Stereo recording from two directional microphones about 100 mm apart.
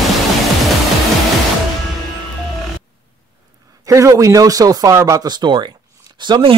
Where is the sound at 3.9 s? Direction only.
30° right (ahead or behind); by 5.7 s 50° right (ahead or behind).